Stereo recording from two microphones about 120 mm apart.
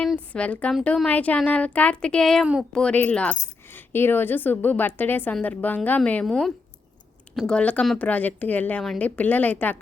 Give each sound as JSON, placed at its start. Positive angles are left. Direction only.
{"t": 0.0, "sound": "a woman's voice", "side_deg": 5}
{"t": 8.8, "sound": "speech", "side_deg": 5}
{"t": 9.0, "sound": "speech", "side_deg": 15}